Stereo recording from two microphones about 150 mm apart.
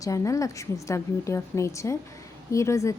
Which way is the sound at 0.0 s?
20° left (ahead or behind).